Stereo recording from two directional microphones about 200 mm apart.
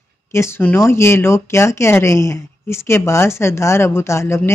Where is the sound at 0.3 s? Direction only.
15° left (ahead or behind).